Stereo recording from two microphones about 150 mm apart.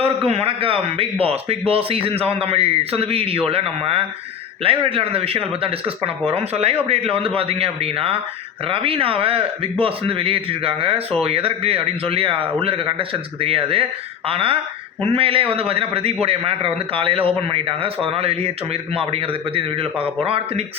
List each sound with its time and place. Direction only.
0.3 s a man's voice: 40° right (ahead or behind)